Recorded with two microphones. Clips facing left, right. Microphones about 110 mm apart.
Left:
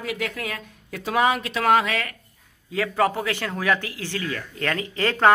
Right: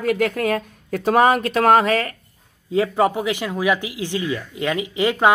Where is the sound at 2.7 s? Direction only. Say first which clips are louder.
Right 4 dB; 20° right (ahead or behind).